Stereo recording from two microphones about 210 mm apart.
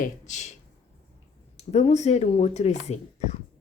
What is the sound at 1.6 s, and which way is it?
Speech, 30° left (ahead or behind).